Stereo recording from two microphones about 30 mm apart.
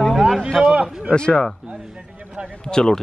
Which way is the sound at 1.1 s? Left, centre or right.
Left.